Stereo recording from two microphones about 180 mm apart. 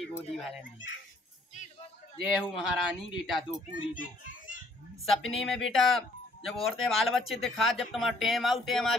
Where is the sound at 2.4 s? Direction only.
5° right (ahead or behind).